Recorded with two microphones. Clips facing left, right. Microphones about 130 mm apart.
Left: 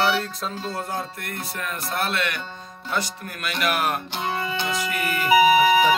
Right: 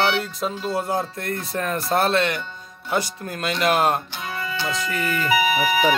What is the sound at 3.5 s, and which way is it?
Speech, 25° right (ahead or behind).